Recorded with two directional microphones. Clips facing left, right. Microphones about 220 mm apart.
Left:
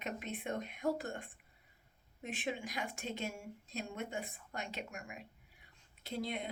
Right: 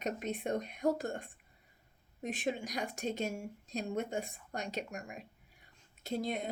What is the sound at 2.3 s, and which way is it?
Speech, 40° right (ahead or behind).